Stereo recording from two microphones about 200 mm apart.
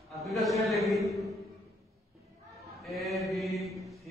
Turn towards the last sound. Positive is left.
turn(degrees=0)  # may be behind; listen again after turning